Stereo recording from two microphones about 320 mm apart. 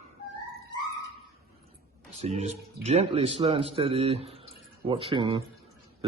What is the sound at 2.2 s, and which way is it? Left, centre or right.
A man's voice, centre.